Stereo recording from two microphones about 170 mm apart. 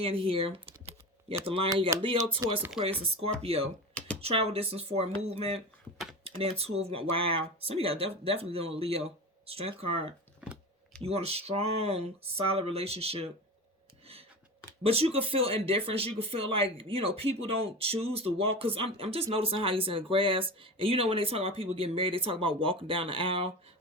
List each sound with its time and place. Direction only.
0.0 s typing: 35° right (ahead or behind)
1.5 s speech: 35° right (ahead or behind)
14.8 s speech: 35° right (ahead or behind)